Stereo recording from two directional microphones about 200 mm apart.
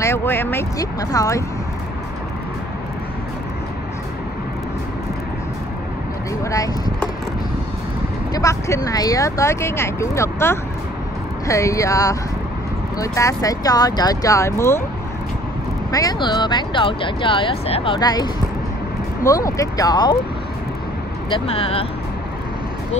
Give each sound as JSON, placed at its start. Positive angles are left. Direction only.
{"t": 0.0, "sound": "speech", "side_deg": 10}
{"t": 6.4, "sound": "speech", "side_deg": 15}
{"t": 8.3, "sound": "speech", "side_deg": 15}
{"t": 15.9, "sound": "speech", "side_deg": 20}
{"t": 21.3, "sound": "speech", "side_deg": 30}